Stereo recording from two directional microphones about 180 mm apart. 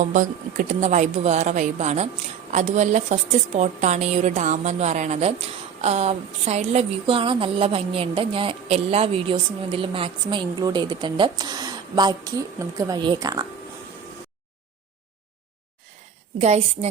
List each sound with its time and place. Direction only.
0.0 s a woman's voice: 45° right (ahead or behind); by 13.5 s 20° right (ahead or behind)
16.4 s a woman's voice: 35° right (ahead or behind)